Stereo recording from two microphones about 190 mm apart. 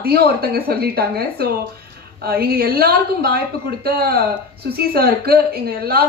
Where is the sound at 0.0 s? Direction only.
55° right (ahead or behind).